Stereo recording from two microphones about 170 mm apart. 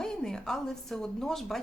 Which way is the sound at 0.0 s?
5° left (ahead or behind).